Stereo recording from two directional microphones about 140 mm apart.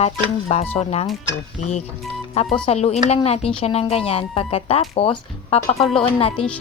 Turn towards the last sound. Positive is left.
turn(degrees=40)  # may be behind; listen again after turning